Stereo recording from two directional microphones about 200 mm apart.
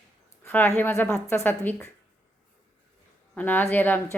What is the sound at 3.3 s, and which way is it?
Speech, 10° left (ahead or behind).